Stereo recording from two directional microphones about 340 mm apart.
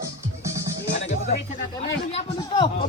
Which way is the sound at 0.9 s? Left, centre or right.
Centre.